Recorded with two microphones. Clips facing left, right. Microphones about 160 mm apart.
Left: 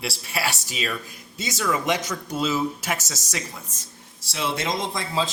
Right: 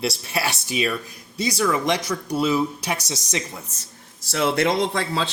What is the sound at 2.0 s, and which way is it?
Speech, 10° right (ahead or behind).